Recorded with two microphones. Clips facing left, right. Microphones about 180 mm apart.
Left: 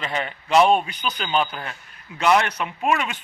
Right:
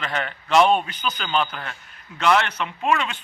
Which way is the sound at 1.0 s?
35° left (ahead or behind).